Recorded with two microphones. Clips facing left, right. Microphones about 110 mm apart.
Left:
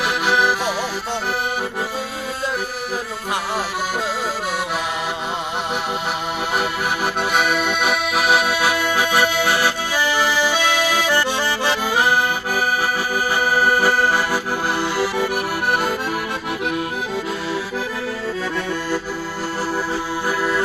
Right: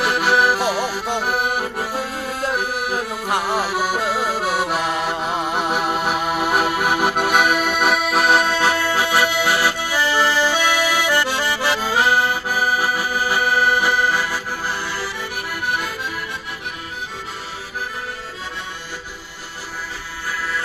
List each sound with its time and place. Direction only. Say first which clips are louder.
0.0 s accordion: right 1 dB; centre (ahead or behind)
5.7 s music: right 3 dB; 5° right (ahead or behind)
6.6 s music: right 3 dB; 50° right (ahead or behind)
7.3 s accordion: right 2 dB; 5° right (ahead or behind); by 11.9 s 20° left (ahead or behind)
13.3 s accordion: even; 30° left (ahead or behind)
14.9 s accordion: left 8 dB; 50° left (ahead or behind)